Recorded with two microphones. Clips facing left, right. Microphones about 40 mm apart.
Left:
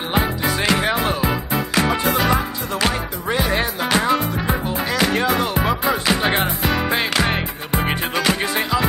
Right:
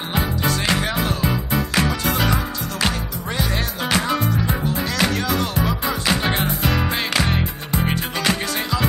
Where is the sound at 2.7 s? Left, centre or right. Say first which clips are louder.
Left 3 dB; centre.